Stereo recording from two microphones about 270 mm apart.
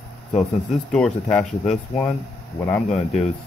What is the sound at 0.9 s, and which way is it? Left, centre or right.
Speech, centre.